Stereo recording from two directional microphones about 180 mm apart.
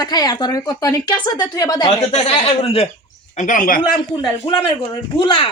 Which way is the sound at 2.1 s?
30° left (ahead or behind).